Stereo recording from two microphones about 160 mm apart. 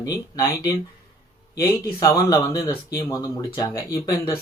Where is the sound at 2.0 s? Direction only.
20° left (ahead or behind).